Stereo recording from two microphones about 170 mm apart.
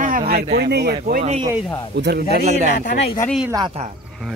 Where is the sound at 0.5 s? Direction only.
75° right (ahead or behind); by 1.2 s 60° right (ahead or behind).